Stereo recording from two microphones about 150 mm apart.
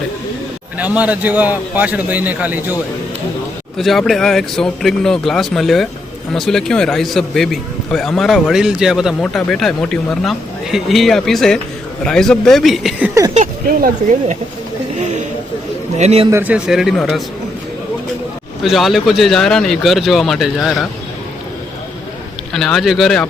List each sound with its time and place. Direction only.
0.8 s a man's voice: 10° right (ahead or behind)
3.8 s a man's voice: centre (ahead or behind)
13.3 s speech: 65° right (ahead or behind)
16.0 s a man's voice: 45° right (ahead or behind)
16.3 s a man's voice: 10° right (ahead or behind)
18.6 s a man's voice: centre (ahead or behind)
22.5 s a man's voice: 5° left (ahead or behind)